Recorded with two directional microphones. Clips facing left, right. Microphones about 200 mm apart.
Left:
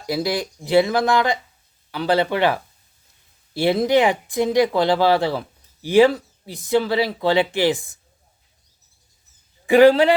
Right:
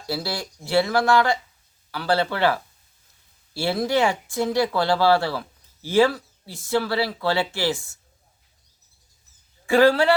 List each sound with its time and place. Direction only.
0.0 s speech: 15° left (ahead or behind)
9.6 s speech: 15° left (ahead or behind)